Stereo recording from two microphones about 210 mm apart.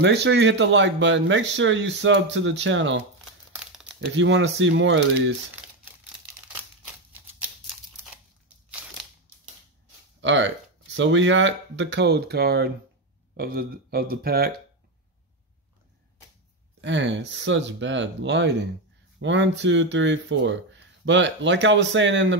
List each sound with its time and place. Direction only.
0.0 s speech: 55° right (ahead or behind)
3.5 s crumpling: 5° right (ahead or behind)
4.0 s speech: 60° right (ahead or behind)
7.1 s scissors: 10° right (ahead or behind)
10.2 s speech: 60° right (ahead or behind)
16.8 s speech: 60° right (ahead or behind)